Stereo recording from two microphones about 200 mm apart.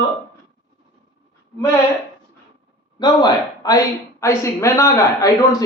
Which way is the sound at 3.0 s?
20° left (ahead or behind).